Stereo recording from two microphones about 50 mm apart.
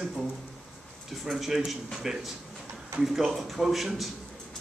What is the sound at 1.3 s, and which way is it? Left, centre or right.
A man's voice, centre.